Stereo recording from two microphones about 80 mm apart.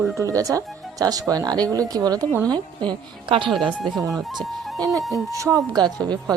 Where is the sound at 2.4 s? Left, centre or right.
Right.